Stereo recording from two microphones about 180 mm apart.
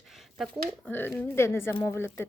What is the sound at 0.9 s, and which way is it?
Speech, 10° left (ahead or behind).